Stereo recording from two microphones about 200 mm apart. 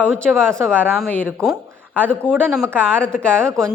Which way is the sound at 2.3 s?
5° right (ahead or behind).